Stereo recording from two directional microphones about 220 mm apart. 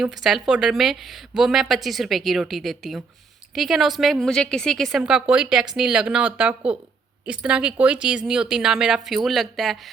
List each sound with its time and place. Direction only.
0.0 s a woman's voice: centre (ahead or behind)